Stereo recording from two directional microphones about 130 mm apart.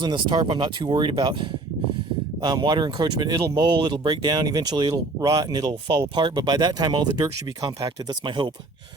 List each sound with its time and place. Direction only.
0.0 s speech: 35° right (ahead or behind)